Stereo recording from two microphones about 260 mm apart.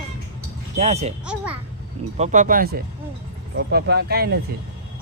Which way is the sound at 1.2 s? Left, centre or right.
Centre.